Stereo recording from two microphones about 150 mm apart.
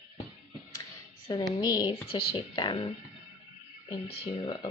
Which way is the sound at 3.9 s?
40° left (ahead or behind).